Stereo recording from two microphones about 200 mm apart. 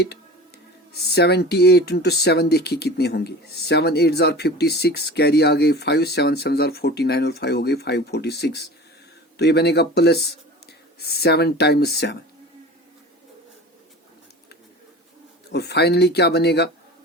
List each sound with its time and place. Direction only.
0.9 s speech: 55° left (ahead or behind)
15.5 s speech: 55° left (ahead or behind)